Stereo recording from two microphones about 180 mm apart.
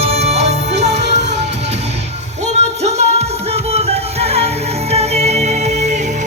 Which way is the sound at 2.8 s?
35° right (ahead or behind).